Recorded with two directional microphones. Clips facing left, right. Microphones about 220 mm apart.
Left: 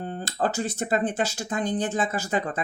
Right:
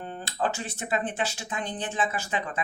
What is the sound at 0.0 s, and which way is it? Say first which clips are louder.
Speech: left 3 dB; 40° left (ahead or behind).